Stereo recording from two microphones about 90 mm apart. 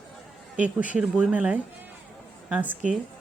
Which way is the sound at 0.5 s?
15° right (ahead or behind).